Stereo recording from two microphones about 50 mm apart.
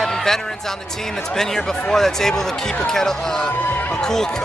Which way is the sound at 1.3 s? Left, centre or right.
Centre.